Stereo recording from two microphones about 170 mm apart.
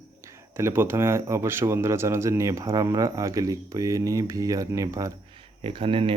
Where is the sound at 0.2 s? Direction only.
15° right (ahead or behind).